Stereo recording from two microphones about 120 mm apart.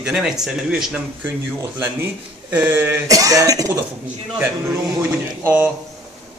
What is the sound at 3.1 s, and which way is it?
Speech, 30° right (ahead or behind).